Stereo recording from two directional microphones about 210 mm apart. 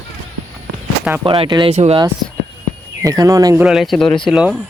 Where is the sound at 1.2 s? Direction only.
25° right (ahead or behind).